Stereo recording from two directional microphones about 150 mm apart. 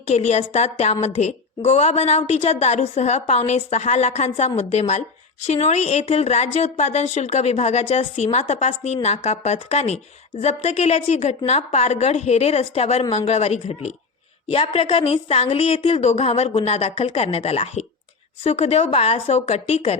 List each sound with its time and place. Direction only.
0.1 s a woman's voice: 50° left (ahead or behind)